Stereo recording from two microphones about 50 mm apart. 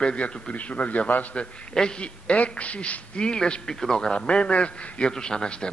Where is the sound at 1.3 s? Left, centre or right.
Centre.